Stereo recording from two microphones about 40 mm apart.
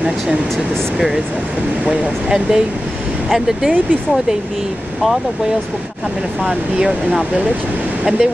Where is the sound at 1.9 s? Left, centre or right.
Centre.